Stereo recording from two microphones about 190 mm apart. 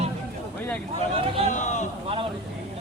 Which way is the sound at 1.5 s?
40° left (ahead or behind).